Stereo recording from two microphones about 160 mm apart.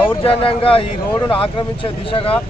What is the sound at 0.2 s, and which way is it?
Speech, 35° left (ahead or behind).